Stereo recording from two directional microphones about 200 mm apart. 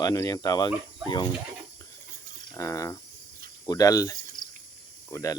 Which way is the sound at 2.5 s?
15° left (ahead or behind).